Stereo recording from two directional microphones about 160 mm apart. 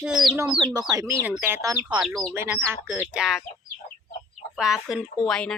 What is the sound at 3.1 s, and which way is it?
Speech, 5° right (ahead or behind).